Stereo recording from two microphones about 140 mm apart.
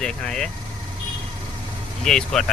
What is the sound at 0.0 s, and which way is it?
Speech, 5° left (ahead or behind).